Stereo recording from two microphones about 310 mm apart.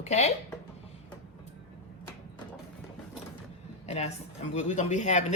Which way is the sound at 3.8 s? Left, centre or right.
Left.